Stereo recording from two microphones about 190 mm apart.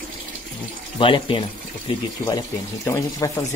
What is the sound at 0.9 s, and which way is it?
Speech, 25° left (ahead or behind).